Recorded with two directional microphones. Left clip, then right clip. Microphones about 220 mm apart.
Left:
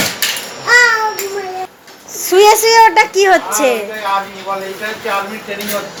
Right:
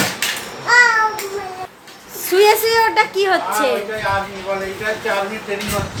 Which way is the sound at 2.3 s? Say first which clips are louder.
Left 5 dB; 25° left (ahead or behind).